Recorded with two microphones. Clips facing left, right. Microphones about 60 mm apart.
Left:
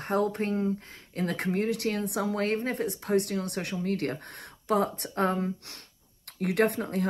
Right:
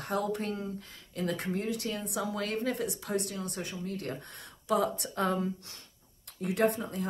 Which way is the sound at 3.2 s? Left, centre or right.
Left.